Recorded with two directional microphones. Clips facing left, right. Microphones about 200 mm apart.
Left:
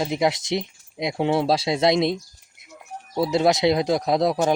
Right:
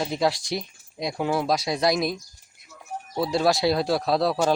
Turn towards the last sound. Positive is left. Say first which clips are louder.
# left 2 dB
turn(degrees=20)  # may be behind; listen again after turning